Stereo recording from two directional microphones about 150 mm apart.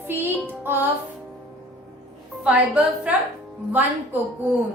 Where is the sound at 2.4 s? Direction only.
5° right (ahead or behind).